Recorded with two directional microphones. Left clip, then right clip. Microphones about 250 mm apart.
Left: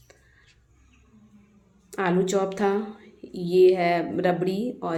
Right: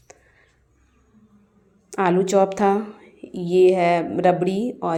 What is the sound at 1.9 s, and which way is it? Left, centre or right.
A woman's voice, centre.